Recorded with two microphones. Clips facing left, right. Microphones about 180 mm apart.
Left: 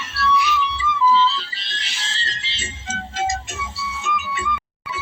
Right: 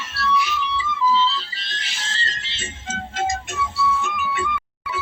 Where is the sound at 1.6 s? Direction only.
45° right (ahead or behind).